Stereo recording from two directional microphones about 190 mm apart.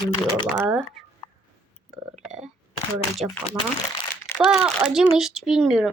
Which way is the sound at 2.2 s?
5° right (ahead or behind).